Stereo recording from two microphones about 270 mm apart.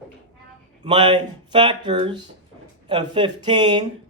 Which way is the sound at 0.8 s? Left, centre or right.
Centre.